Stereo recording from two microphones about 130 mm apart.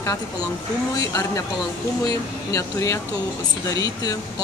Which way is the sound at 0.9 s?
25° left (ahead or behind).